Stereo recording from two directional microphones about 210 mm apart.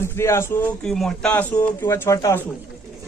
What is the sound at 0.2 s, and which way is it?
Speech, 10° left (ahead or behind).